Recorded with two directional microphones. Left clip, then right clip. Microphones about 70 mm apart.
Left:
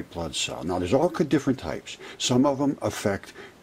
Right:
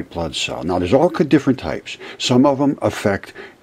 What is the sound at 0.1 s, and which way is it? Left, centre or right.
Speech, centre.